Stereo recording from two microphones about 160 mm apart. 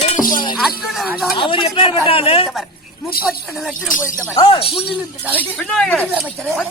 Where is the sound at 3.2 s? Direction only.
Centre (ahead or behind).